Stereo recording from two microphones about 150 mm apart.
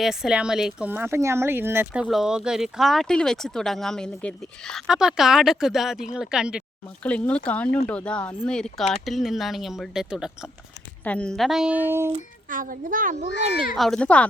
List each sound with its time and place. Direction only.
0.0 s speech: 5° right (ahead or behind)
7.0 s speech: 10° left (ahead or behind)
11.0 s speech: 10° left (ahead or behind); by 12.1 s 15° right (ahead or behind)
12.5 s a child's voice: 65° right (ahead or behind)
13.7 s speech: 5° left (ahead or behind)